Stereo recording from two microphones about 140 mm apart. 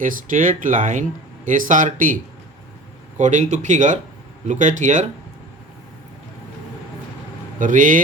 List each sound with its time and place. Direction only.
0.0 s speech: 70° right (ahead or behind)
3.2 s speech: 60° right (ahead or behind)
7.6 s speech: 65° right (ahead or behind)